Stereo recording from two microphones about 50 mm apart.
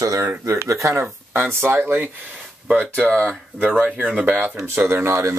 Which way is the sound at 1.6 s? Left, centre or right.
Right.